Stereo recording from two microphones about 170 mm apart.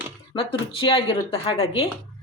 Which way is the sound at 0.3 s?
30° left (ahead or behind).